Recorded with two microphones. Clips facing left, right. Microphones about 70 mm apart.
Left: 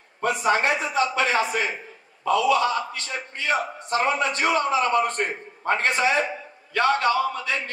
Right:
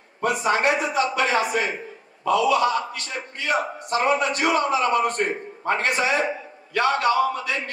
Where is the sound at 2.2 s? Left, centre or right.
Left.